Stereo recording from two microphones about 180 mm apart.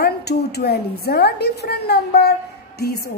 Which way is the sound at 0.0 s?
65° left (ahead or behind).